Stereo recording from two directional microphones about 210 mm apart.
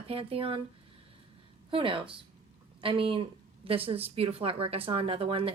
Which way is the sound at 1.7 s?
25° right (ahead or behind).